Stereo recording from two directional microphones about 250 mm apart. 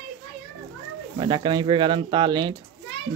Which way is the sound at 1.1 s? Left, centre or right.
Centre.